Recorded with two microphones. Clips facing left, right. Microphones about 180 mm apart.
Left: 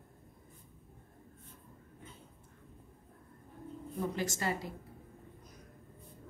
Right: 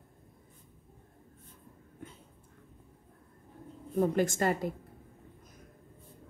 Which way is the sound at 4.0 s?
50° right (ahead or behind).